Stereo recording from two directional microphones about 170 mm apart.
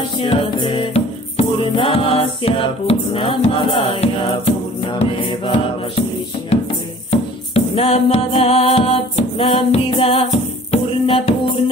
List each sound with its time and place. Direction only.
0.2 s music: 30° left (ahead or behind)
7.1 s music: 35° left (ahead or behind)